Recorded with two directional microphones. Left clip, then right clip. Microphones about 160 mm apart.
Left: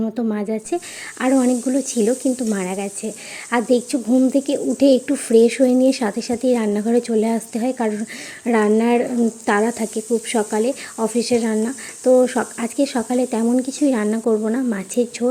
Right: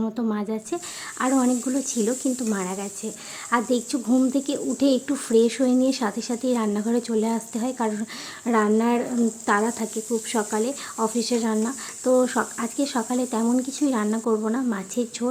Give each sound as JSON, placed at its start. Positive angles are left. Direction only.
{"t": 0.2, "sound": "speech", "side_deg": 15}